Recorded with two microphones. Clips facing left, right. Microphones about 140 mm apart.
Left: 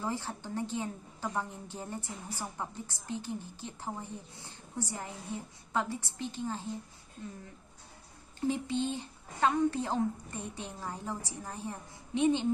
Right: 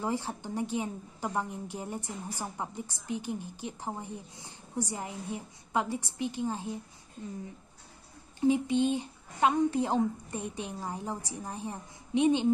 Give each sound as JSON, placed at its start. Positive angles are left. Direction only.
{"t": 0.0, "sound": "a woman's voice", "side_deg": -15}
{"t": 8.4, "sound": "a woman's voice", "side_deg": -15}